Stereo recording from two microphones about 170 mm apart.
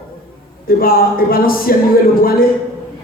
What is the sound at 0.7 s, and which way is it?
Speech, 60° left (ahead or behind).